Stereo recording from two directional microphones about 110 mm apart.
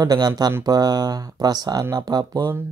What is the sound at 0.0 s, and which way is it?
Speech, 40° right (ahead or behind).